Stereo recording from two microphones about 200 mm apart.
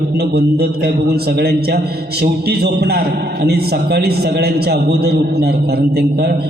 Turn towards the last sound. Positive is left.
turn(degrees=-55)  # may be behind; listen again after turning